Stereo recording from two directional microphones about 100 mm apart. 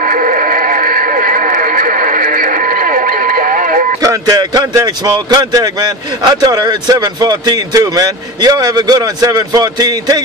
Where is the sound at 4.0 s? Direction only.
35° right (ahead or behind).